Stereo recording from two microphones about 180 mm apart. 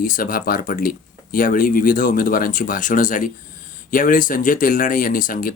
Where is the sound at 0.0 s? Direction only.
50° left (ahead or behind).